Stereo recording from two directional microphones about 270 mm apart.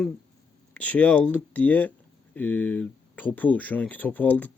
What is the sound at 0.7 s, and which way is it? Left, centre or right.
Speech, centre.